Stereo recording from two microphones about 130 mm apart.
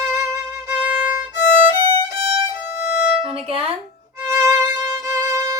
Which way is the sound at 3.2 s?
45° right (ahead or behind).